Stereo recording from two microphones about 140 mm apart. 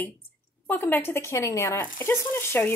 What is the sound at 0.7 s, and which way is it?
Speech, 15° left (ahead or behind).